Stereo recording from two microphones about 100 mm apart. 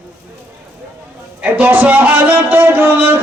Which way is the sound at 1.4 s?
15° right (ahead or behind).